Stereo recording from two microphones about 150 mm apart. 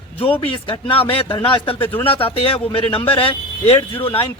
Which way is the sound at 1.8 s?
10° left (ahead or behind).